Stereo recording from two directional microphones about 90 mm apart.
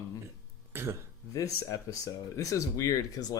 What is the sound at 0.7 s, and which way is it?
Speech, 25° right (ahead or behind).